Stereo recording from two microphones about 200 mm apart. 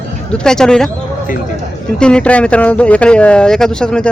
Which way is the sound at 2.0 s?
5° left (ahead or behind).